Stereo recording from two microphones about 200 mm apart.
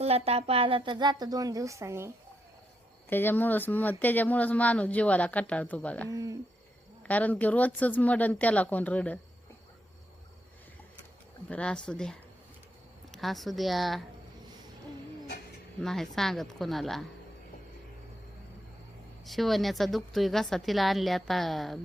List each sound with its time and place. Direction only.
0.0 s speech: 30° right (ahead or behind); by 2.1 s 15° right (ahead or behind)
3.1 s speech: 10° left (ahead or behind)
6.1 s speech: 15° right (ahead or behind)
7.1 s speech: 5° left (ahead or behind)
11.4 s a woman's voice: 5° left (ahead or behind)
15.8 s a woman's voice: centre (ahead or behind)
19.2 s a woman's voice: centre (ahead or behind)